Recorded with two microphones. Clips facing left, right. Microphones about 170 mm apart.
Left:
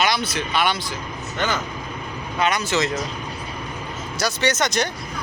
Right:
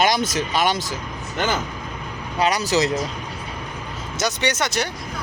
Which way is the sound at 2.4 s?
35° right (ahead or behind).